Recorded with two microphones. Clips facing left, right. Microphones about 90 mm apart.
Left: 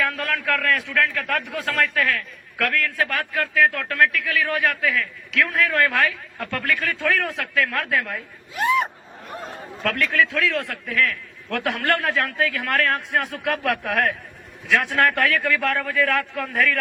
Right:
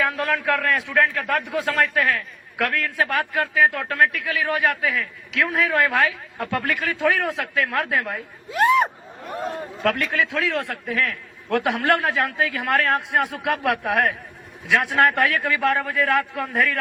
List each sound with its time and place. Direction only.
0.0 s a man's voice: 15° right (ahead or behind)
9.8 s a man's voice: 15° right (ahead or behind)